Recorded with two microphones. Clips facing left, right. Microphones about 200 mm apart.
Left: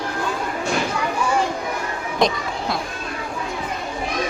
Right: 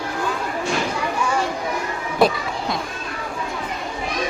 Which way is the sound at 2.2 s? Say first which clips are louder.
Right 2 dB; 5° right (ahead or behind).